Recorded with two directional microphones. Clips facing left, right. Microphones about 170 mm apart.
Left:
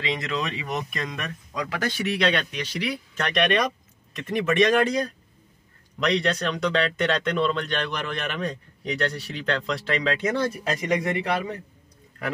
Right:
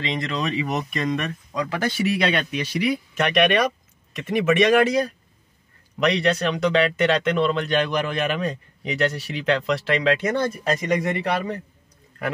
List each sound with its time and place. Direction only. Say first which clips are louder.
0.0 s speech: right 2 dB; 5° left (ahead or behind)